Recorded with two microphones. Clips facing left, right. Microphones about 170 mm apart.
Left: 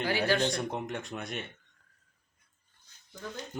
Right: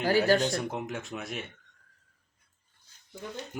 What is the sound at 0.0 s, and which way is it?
Speech, 40° right (ahead or behind).